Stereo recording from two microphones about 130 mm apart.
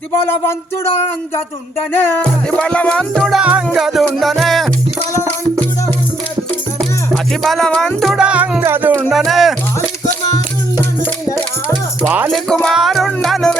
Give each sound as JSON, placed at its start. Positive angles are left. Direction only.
{"t": 1.9, "sound": "music", "side_deg": 15}
{"t": 3.2, "sound": "music", "side_deg": 0}
{"t": 7.1, "sound": "music", "side_deg": 0}
{"t": 8.6, "sound": "speech", "side_deg": -15}
{"t": 9.0, "sound": "music", "side_deg": 0}
{"t": 12.0, "sound": "speech", "side_deg": -15}
{"t": 12.6, "sound": "music", "side_deg": 0}